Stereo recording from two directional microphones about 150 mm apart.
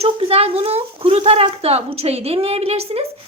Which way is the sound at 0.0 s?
40° right (ahead or behind).